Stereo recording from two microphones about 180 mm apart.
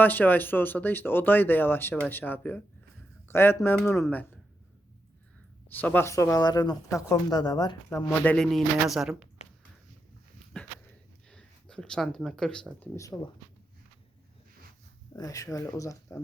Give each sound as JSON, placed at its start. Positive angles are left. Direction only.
{"t": 0.0, "sound": "speech", "side_deg": 10}
{"t": 5.7, "sound": "speech", "side_deg": 10}
{"t": 11.3, "sound": "speech", "side_deg": 5}
{"t": 12.8, "sound": "speech", "side_deg": 15}
{"t": 15.1, "sound": "speech", "side_deg": 20}